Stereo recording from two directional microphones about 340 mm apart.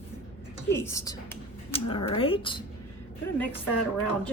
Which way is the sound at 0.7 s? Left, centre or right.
Centre.